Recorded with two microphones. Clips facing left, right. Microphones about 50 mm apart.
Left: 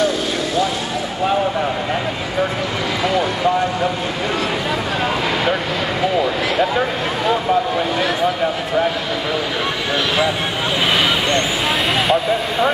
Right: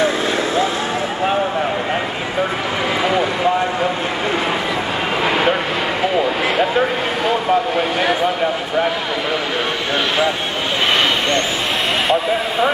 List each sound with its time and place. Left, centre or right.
3.0 s speech: right
12.1 s speech: centre